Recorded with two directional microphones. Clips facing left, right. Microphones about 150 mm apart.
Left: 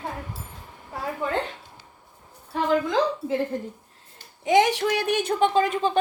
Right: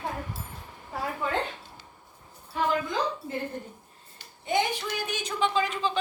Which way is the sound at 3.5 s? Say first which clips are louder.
Left 7 dB; 90° left.